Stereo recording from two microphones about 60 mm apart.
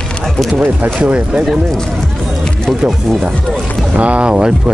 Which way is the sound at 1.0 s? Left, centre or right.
Centre.